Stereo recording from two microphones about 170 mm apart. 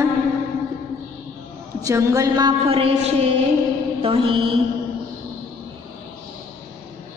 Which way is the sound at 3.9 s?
30° right (ahead or behind).